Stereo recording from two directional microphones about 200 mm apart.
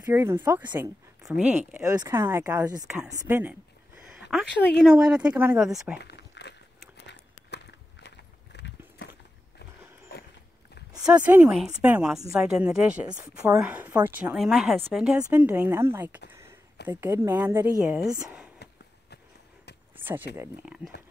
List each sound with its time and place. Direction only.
0.0 s speech: 15° right (ahead or behind)
1.7 s speech: 15° right (ahead or behind)
4.3 s speech: centre (ahead or behind)
5.9 s a sound: 55° left (ahead or behind)
7.1 s walk: 60° left (ahead or behind)
8.5 s a sound: 55° left (ahead or behind)
11.1 s speech: 5° right (ahead or behind)
20.3 s speech: 5° right (ahead or behind)